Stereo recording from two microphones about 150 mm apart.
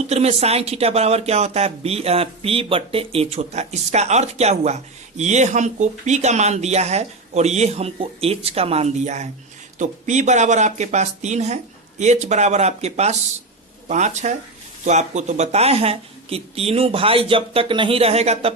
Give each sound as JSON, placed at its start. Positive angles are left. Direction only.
{"t": 0.1, "sound": "speech", "side_deg": -45}